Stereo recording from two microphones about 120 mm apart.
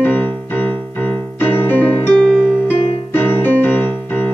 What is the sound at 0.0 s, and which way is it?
Music, 15° left (ahead or behind).